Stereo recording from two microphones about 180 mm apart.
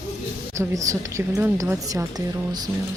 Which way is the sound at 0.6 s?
15° right (ahead or behind).